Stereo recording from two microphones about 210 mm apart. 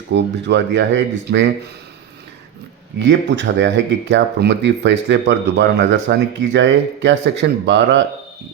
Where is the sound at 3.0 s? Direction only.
55° right (ahead or behind).